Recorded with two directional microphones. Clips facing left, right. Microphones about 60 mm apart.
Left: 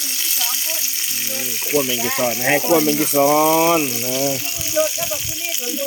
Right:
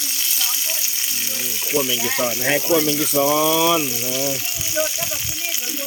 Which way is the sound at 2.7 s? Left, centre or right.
Left.